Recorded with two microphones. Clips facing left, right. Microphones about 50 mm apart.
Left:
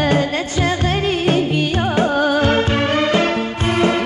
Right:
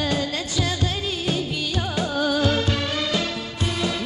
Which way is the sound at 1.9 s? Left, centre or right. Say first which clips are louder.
Left 6 dB; left.